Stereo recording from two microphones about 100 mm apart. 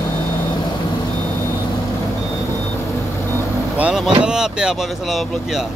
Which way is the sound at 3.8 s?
10° right (ahead or behind).